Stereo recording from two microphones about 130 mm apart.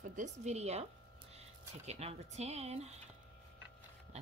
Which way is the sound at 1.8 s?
55° right (ahead or behind).